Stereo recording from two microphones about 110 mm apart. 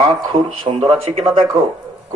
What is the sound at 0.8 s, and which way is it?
Speech, 60° right (ahead or behind).